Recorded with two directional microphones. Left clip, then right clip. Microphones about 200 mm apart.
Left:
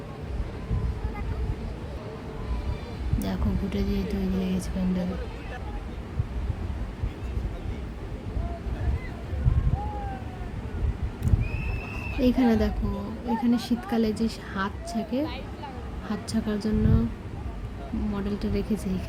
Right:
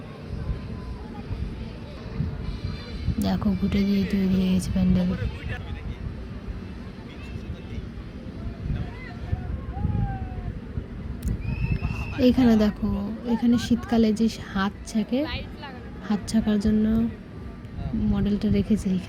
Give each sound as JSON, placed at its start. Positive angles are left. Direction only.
{"t": 3.2, "sound": "a woman's voice", "side_deg": -20}
{"t": 12.1, "sound": "a woman's voice", "side_deg": -20}
{"t": 18.1, "sound": "a woman's voice", "side_deg": -15}